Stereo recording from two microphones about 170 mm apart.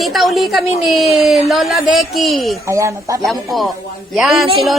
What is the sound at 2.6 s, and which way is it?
Speech, 15° right (ahead or behind).